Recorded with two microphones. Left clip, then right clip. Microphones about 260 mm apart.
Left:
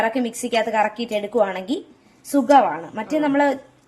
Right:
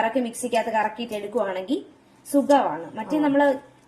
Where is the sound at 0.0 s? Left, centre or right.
Left.